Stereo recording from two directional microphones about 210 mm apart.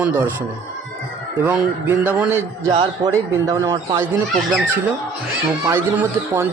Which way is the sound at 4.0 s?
10° right (ahead or behind).